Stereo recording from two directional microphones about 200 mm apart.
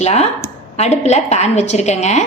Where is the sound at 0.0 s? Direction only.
35° left (ahead or behind).